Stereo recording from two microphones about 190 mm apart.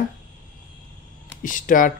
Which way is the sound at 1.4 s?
45° left (ahead or behind).